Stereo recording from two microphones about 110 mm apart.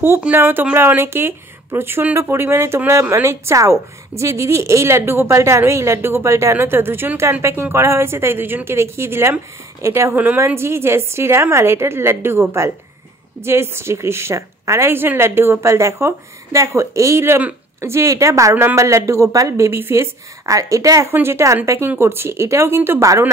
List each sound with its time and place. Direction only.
0.2 s a woman's voice: 15° right (ahead or behind)